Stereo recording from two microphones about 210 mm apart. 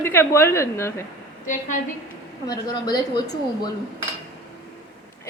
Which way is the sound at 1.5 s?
35° left (ahead or behind).